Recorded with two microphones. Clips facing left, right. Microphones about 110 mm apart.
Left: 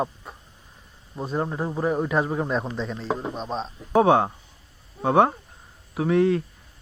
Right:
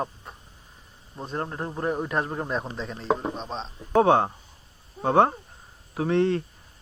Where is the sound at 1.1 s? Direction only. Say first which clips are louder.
Left 4 dB; 5° left (ahead or behind).